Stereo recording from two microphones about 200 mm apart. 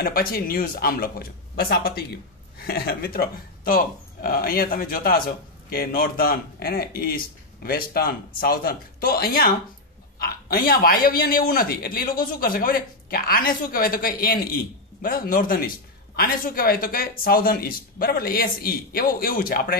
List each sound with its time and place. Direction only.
0.0 s a man's voice: 50° left (ahead or behind)